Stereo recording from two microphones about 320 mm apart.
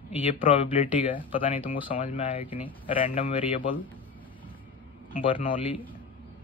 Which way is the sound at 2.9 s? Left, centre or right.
Left.